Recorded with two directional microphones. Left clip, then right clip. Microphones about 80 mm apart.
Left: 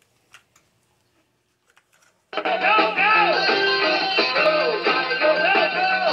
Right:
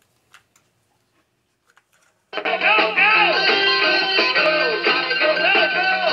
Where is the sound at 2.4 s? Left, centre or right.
Right.